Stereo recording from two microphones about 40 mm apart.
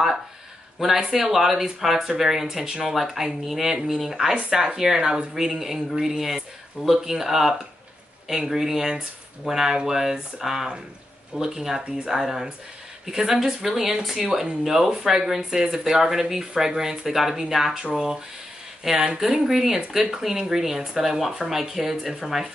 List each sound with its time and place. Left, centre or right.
0.7 s speech: centre
2.8 s speech: centre
18.8 s speech: centre
21.5 s speech: centre